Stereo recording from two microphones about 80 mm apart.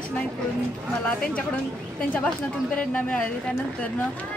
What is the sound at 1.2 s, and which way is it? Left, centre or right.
A woman's voice, centre.